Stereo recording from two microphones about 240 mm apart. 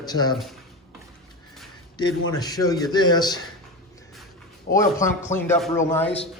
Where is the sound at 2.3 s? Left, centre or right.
Centre.